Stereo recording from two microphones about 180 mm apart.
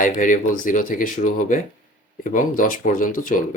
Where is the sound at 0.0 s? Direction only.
45° left (ahead or behind).